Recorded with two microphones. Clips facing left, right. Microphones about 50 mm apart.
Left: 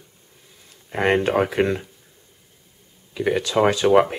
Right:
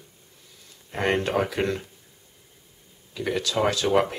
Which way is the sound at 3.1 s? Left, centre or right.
Left.